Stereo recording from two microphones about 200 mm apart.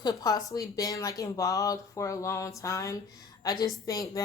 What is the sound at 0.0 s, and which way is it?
Speech, 20° left (ahead or behind).